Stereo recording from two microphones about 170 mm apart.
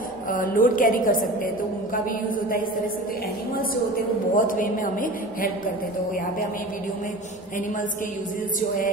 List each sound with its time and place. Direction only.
0.3 s a woman's voice: 55° left (ahead or behind)
4.3 s a woman's voice: 50° left (ahead or behind)
8.5 s a woman's voice: 50° left (ahead or behind)